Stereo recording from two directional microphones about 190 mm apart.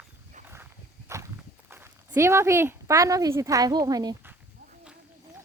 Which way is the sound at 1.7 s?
15° right (ahead or behind).